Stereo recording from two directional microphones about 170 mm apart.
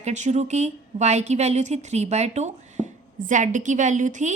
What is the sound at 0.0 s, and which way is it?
A woman's voice, 45° right (ahead or behind).